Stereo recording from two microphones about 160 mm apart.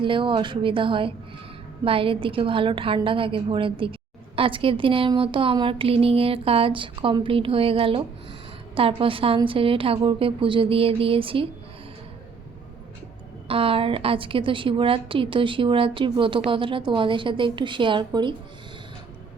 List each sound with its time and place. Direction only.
0.0 s a woman's voice: 30° right (ahead or behind)
13.5 s a woman's voice: 35° right (ahead or behind)